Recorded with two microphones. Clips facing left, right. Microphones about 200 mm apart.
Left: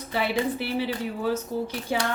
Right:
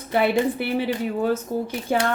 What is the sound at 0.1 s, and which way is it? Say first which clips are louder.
A woman's voice: right 6 dB; 55° right (ahead or behind).